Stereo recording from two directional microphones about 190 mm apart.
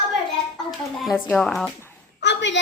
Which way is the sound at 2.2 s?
70° left (ahead or behind).